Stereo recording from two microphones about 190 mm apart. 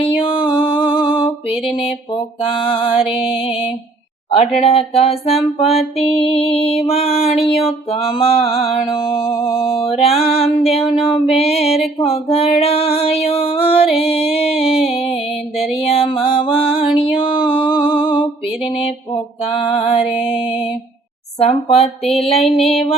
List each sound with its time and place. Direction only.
0.0 s music: 25° left (ahead or behind)
4.3 s music: 35° left (ahead or behind)
8.9 s music: 20° left (ahead or behind)
9.9 s music: 30° left (ahead or behind)
12.0 s female singing: 30° left (ahead or behind)
15.5 s mantra: centre (ahead or behind)
15.9 s music: 30° left (ahead or behind)
21.3 s music: 35° left (ahead or behind)
22.5 s mantra: centre (ahead or behind)